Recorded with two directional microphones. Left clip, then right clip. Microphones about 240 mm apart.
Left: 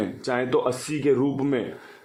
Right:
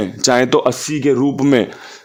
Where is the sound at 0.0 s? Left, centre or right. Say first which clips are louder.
Right 12 dB; right.